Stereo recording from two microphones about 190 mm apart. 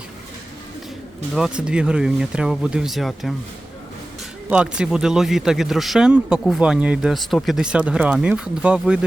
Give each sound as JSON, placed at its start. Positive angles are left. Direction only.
{"t": 1.4, "sound": "speech", "side_deg": -5}
{"t": 4.4, "sound": "speech", "side_deg": -5}